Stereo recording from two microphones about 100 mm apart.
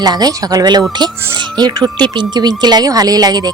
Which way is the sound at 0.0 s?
40° right (ahead or behind).